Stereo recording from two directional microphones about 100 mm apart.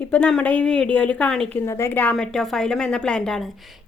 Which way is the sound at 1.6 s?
25° left (ahead or behind).